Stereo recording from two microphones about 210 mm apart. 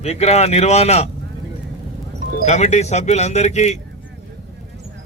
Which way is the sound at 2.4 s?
30° left (ahead or behind).